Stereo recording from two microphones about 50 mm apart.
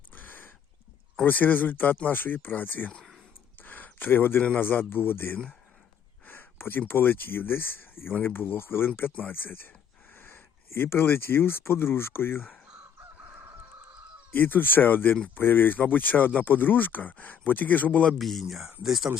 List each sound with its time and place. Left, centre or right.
0.1 s a sound: left
1.2 s speech: left
3.6 s a sound: left
4.6 s speech: left
14.3 s speech: left
18.2 s speech: centre